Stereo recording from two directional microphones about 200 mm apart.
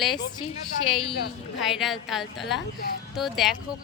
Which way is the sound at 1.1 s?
50° left (ahead or behind).